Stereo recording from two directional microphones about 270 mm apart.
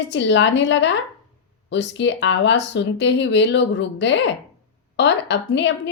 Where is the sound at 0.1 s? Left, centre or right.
Left.